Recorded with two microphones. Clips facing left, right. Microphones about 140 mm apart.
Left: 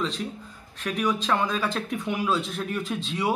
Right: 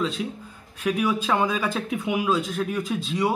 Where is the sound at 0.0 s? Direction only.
5° right (ahead or behind).